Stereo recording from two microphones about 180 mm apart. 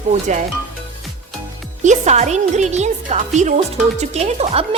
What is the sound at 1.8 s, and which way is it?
Speech, 40° right (ahead or behind).